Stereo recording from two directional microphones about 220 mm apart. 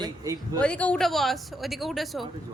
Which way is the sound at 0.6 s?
5° left (ahead or behind).